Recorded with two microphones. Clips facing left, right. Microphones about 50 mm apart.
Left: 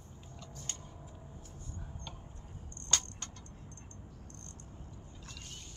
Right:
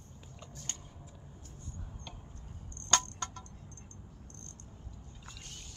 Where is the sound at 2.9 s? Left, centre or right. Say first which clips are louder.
Right 7 dB; right.